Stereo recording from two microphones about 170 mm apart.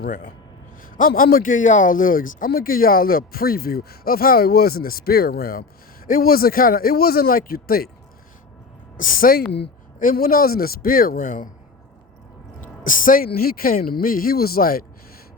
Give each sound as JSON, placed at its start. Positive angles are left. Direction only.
{"t": 0.0, "sound": "a man's voice", "side_deg": 55}
{"t": 9.0, "sound": "a man's voice", "side_deg": 55}
{"t": 12.5, "sound": "a man's voice", "side_deg": 50}